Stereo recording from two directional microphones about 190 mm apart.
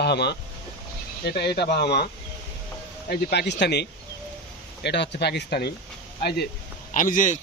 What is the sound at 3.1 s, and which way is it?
Speech, 60° left (ahead or behind).